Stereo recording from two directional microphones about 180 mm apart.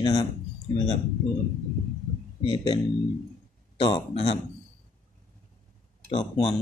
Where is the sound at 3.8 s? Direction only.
30° left (ahead or behind).